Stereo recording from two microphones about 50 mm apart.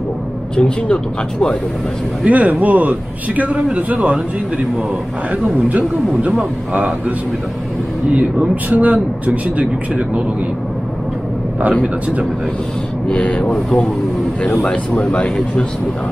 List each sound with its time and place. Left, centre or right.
0.6 s speech: centre
2.2 s a man's voice: right
13.1 s speech: left
14.6 s speech: left